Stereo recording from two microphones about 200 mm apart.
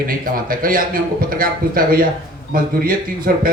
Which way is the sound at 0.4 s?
45° right (ahead or behind).